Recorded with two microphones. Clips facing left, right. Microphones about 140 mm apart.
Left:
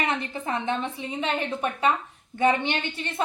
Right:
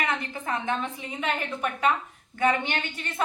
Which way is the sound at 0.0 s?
25° left (ahead or behind).